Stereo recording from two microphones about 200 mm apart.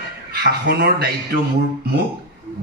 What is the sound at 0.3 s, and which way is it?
Music, 55° right (ahead or behind).